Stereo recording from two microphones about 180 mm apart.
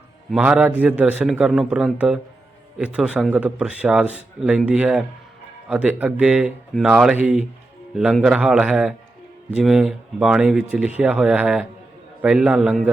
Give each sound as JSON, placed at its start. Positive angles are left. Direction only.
{"t": 0.3, "sound": "speech", "side_deg": -5}